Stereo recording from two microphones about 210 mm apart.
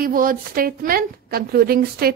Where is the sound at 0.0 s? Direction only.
40° right (ahead or behind).